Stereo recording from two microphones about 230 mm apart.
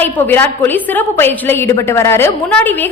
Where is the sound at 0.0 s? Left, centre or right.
Centre.